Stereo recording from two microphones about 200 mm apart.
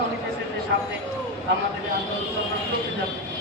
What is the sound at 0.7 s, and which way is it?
Speech, 55° right (ahead or behind).